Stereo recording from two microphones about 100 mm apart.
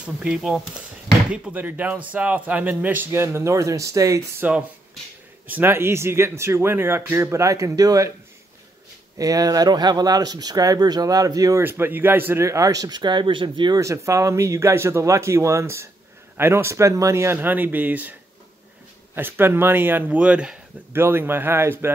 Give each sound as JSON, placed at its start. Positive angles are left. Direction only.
{"t": 0.0, "sound": "speech", "side_deg": -5}
{"t": 4.4, "sound": "speech", "side_deg": -15}
{"t": 9.2, "sound": "speech", "side_deg": -35}
{"t": 11.6, "sound": "speech", "side_deg": -20}
{"t": 13.7, "sound": "speech", "side_deg": -30}
{"t": 19.1, "sound": "speech", "side_deg": -20}
{"t": 20.9, "sound": "speech", "side_deg": -25}